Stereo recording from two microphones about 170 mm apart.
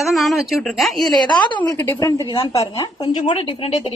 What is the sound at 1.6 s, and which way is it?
Speech, 10° left (ahead or behind).